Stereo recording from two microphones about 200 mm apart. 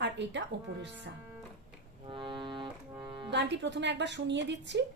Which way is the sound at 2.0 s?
25° right (ahead or behind).